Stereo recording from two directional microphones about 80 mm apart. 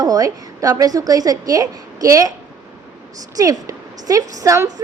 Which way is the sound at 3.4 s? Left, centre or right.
Right.